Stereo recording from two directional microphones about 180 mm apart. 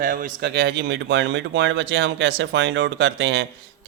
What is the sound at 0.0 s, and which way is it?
Speech, 50° right (ahead or behind).